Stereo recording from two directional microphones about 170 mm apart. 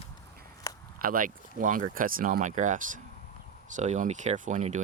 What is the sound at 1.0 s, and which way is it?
Speech, 55° right (ahead or behind).